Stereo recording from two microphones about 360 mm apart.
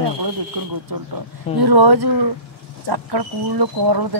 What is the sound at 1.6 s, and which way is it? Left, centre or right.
Speech, right.